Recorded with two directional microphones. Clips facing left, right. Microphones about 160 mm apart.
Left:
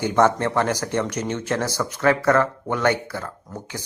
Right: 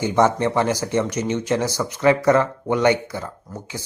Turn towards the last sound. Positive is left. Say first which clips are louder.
# right 1 dB
turn(degrees=-5)  # may be behind; listen again after turning